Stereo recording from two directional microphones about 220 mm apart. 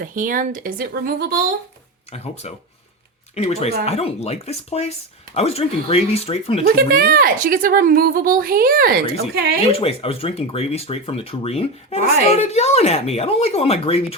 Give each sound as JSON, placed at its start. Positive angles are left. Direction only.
{"t": 0.0, "sound": "a woman's voice", "side_deg": -40}
{"t": 2.1, "sound": "speech", "side_deg": 30}
{"t": 6.7, "sound": "a woman's voice", "side_deg": -40}
{"t": 9.7, "sound": "speech", "side_deg": 25}